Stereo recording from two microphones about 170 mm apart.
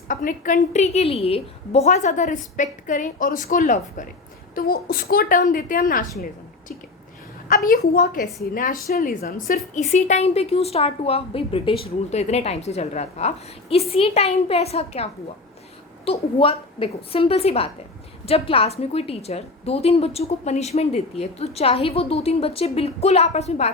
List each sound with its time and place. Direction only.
0.1 s a woman's voice: 50° left (ahead or behind)
4.5 s a woman's voice: 60° left (ahead or behind)
7.5 s a woman's voice: 55° left (ahead or behind); by 23.7 s 40° left (ahead or behind)